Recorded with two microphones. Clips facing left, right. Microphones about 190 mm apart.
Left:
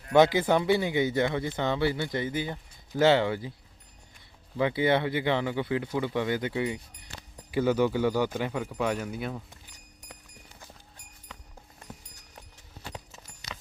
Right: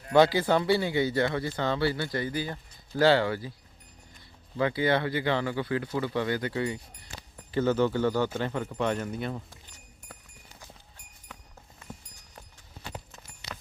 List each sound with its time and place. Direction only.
0.1 s speech: 20° left (ahead or behind)
4.5 s speech: 20° left (ahead or behind); by 9.4 s 5° left (ahead or behind)
13.1 s clip-clop: 5° left (ahead or behind)